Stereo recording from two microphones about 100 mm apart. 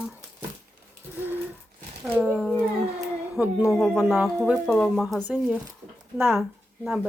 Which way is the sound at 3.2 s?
15° right (ahead or behind).